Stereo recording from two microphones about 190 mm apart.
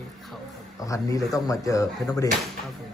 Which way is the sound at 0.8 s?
15° left (ahead or behind).